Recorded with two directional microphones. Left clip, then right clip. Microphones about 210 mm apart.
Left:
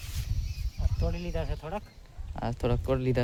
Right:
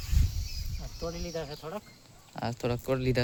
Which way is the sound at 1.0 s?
50° left (ahead or behind).